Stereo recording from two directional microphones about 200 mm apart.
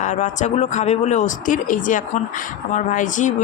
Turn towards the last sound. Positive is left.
turn(degrees=40)  # may be behind; listen again after turning